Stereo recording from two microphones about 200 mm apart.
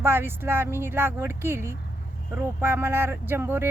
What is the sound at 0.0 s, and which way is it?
A woman's voice, 10° right (ahead or behind).